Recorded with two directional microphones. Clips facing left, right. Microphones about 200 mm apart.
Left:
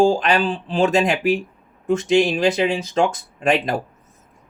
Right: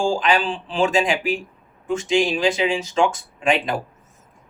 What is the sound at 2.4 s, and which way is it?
Speech, 40° left (ahead or behind).